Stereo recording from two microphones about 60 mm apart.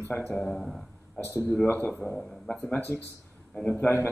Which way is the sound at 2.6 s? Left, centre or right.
Left.